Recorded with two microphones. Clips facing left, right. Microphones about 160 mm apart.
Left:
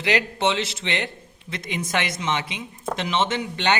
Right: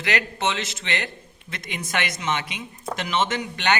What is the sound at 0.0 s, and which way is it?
A man's voice, 30° left (ahead or behind).